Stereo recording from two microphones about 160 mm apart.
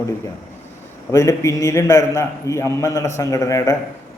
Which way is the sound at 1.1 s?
20° left (ahead or behind).